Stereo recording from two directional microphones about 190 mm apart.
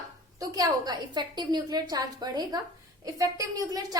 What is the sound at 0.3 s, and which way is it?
A woman's voice, 20° right (ahead or behind).